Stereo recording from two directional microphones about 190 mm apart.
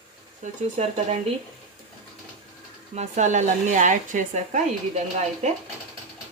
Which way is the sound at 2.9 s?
40° right (ahead or behind).